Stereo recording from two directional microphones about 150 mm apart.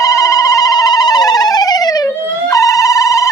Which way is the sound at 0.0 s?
20° left (ahead or behind).